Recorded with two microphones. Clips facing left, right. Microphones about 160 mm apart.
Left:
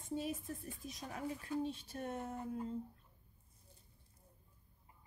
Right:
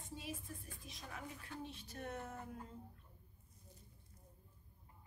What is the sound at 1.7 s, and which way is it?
Speech, 35° left (ahead or behind).